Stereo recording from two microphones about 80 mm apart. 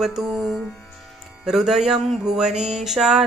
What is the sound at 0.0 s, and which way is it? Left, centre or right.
Music, centre.